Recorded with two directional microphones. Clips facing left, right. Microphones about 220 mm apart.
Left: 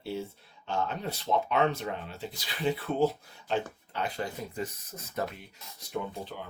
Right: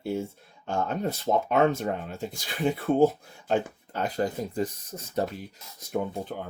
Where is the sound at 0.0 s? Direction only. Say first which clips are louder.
Right 5 dB; 50° right (ahead or behind).